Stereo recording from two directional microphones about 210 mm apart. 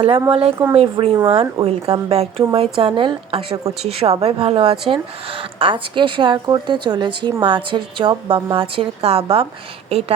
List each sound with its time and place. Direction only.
0.0 s speech: 25° right (ahead or behind)